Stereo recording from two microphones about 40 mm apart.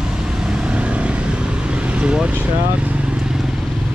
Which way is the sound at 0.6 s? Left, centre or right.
Right.